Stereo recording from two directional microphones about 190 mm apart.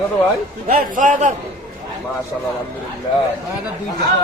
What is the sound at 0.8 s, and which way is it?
Speech, 40° right (ahead or behind).